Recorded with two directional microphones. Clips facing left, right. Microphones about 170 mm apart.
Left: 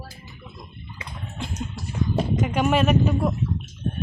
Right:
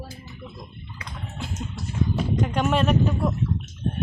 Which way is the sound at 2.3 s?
5° left (ahead or behind).